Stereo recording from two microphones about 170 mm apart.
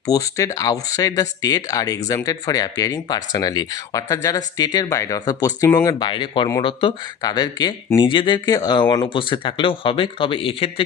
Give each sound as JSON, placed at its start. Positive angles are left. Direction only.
{"t": 0.1, "sound": "speech", "side_deg": 20}
{"t": 5.9, "sound": "speech", "side_deg": 25}